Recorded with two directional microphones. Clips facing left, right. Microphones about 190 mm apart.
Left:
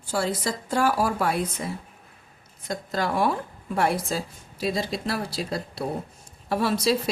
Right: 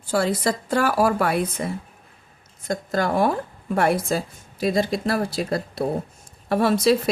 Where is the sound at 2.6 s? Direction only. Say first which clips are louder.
Right 4 dB; 50° right (ahead or behind).